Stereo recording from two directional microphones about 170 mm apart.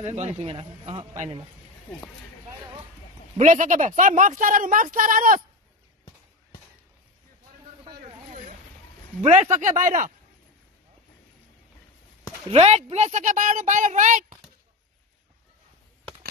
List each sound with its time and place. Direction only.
0.0 s speech: 40° right (ahead or behind)
3.3 s speech: 45° right (ahead or behind)
8.3 s vehicle: 45° right (ahead or behind)
9.2 s speech: 40° right (ahead or behind)
12.4 s speech: 40° right (ahead or behind)